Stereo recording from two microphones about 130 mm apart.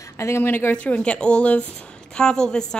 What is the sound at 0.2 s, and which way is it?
A woman's voice, 20° left (ahead or behind).